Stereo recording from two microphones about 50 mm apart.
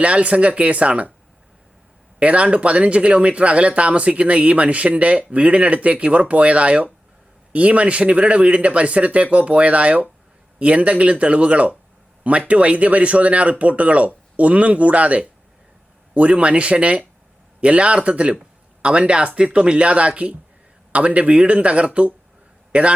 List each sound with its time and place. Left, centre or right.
0.0 s speech: right
2.1 s speech: right